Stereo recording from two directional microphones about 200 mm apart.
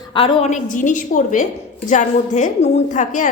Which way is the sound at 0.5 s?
40° left (ahead or behind).